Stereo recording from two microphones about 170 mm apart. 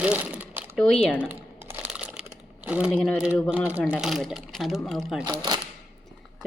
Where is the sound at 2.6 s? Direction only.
5° right (ahead or behind).